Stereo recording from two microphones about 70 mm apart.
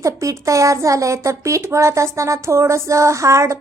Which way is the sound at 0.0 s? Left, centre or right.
Right.